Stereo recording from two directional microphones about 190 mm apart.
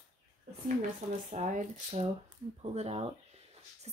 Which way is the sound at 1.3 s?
40° right (ahead or behind).